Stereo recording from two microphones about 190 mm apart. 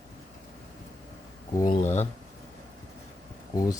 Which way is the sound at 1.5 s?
20° left (ahead or behind).